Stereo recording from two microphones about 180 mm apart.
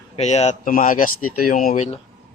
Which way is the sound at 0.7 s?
50° left (ahead or behind).